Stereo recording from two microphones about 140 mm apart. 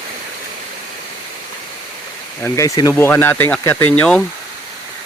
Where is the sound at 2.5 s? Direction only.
25° left (ahead or behind).